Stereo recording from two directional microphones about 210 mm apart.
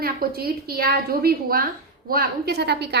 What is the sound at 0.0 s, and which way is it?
A woman's voice, 45° right (ahead or behind).